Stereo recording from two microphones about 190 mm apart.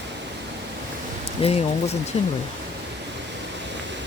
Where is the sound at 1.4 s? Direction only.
30° left (ahead or behind).